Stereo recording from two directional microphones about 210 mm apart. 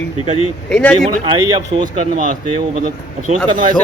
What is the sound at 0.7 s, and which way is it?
Speech, 5° left (ahead or behind).